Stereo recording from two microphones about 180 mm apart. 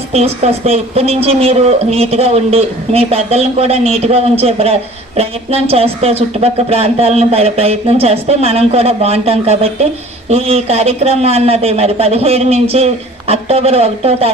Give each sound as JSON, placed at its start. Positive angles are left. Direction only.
{"t": 0.1, "sound": "a woman's voice", "side_deg": -35}